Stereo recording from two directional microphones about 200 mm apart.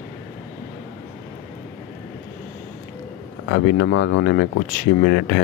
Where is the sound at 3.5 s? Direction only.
65° left (ahead or behind).